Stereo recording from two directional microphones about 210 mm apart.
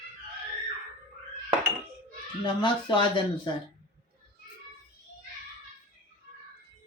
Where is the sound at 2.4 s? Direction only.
20° left (ahead or behind).